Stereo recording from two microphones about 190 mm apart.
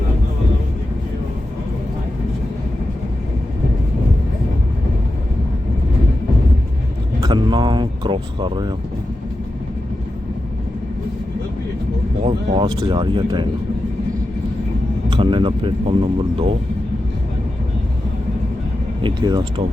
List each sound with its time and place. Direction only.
7.2 s speech: 25° right (ahead or behind)
12.2 s speech: 30° right (ahead or behind)
15.1 s speech: 25° right (ahead or behind)
19.0 s speech: 25° right (ahead or behind)